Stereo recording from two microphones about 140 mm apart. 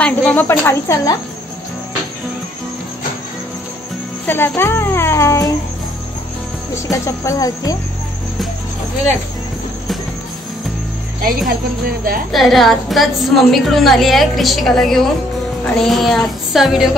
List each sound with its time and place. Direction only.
0.0 s speech: 10° left (ahead or behind)
4.3 s speech: 15° left (ahead or behind)
6.7 s speech: 20° left (ahead or behind)
11.1 s speech: 90° right
12.3 s a woman's voice: centre (ahead or behind)